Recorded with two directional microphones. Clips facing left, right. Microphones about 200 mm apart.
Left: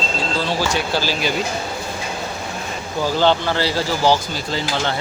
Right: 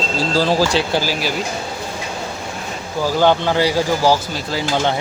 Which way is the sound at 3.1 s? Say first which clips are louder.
Right 3 dB; 15° right (ahead or behind).